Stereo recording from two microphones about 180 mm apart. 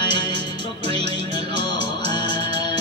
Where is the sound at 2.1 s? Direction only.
25° left (ahead or behind).